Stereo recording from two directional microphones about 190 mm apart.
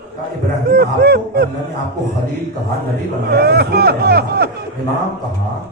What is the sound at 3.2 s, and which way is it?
Speech, 55° right (ahead or behind).